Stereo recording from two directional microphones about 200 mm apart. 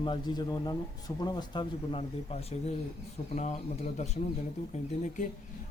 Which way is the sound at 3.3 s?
35° left (ahead or behind).